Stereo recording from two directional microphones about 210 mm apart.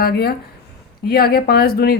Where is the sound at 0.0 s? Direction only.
50° left (ahead or behind).